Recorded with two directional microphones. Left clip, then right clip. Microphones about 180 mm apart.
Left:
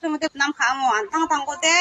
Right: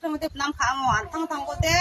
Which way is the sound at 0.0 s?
25° right (ahead or behind).